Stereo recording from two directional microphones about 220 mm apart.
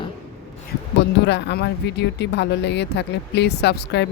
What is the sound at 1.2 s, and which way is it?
Speech, 50° left (ahead or behind).